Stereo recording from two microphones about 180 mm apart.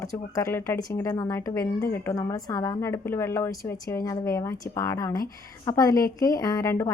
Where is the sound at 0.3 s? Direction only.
15° left (ahead or behind).